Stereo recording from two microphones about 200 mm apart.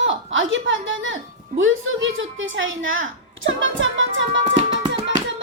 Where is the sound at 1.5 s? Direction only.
80° right.